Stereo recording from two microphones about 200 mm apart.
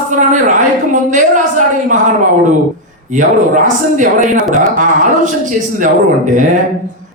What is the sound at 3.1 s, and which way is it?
A man's voice, 40° right (ahead or behind).